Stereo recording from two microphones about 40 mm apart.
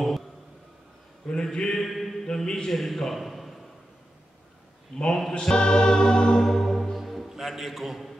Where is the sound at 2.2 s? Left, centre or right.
Centre.